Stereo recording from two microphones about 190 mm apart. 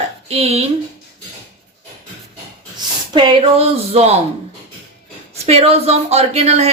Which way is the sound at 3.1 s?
30° right (ahead or behind).